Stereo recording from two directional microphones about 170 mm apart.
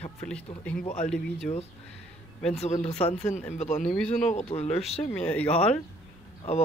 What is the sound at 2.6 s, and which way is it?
Speech, 40° left (ahead or behind).